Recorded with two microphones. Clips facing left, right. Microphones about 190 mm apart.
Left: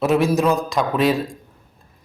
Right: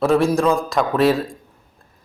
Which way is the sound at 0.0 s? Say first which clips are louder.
Right 1 dB; centre (ahead or behind).